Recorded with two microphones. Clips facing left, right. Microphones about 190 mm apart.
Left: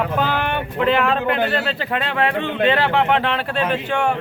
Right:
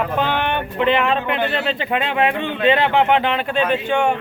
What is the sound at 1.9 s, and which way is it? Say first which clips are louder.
A man's voice: right 1 dB; 5° right (ahead or behind).